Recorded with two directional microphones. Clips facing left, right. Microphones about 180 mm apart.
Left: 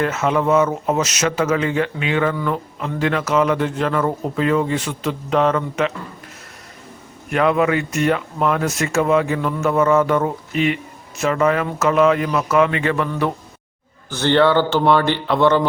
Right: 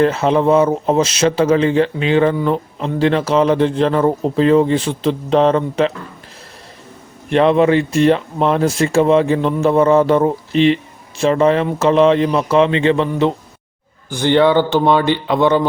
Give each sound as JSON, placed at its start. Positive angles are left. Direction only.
{"t": 0.0, "sound": "a man's voice", "side_deg": -30}
{"t": 7.3, "sound": "speech", "side_deg": -30}
{"t": 14.1, "sound": "a man's voice", "side_deg": -15}